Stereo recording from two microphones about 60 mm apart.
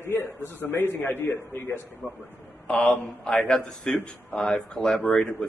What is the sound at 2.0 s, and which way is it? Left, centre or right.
Speech, left.